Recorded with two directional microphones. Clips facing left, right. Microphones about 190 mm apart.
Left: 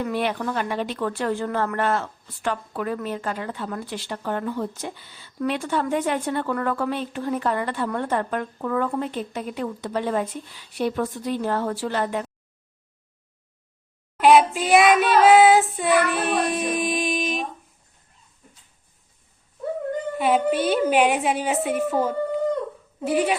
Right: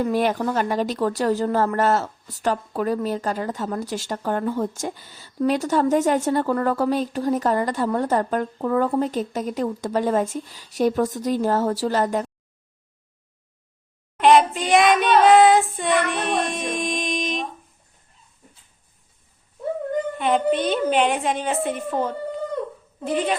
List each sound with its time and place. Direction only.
0.0 s speech: 40° right (ahead or behind)
14.2 s child singing: 5° left (ahead or behind)
20.1 s a woman's voice: 5° left (ahead or behind)